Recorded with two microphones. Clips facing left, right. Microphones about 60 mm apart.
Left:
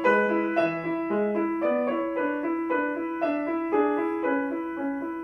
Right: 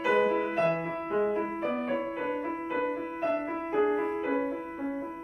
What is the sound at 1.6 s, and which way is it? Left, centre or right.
Piano, left.